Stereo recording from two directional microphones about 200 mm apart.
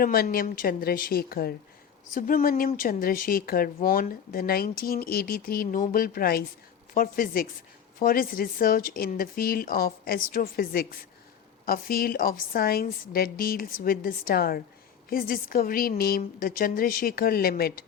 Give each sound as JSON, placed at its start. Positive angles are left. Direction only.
{"t": 0.0, "sound": "a woman's voice", "side_deg": 45}